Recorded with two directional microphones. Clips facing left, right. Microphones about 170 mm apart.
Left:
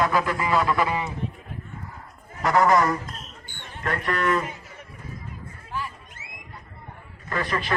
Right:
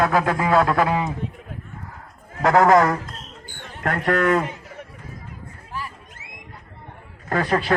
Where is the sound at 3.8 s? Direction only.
65° right (ahead or behind).